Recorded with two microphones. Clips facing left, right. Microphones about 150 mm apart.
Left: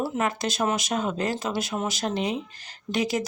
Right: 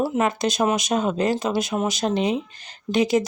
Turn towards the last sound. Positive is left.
turn(degrees=-20)  # may be behind; listen again after turning